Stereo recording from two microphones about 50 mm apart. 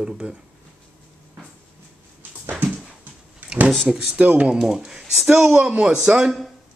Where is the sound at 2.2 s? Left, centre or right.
Right.